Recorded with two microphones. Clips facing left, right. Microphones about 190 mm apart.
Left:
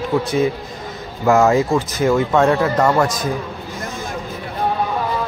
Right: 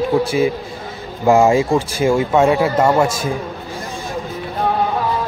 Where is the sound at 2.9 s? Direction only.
25° right (ahead or behind).